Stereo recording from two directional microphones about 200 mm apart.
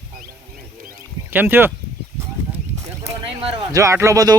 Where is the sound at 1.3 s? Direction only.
10° right (ahead or behind).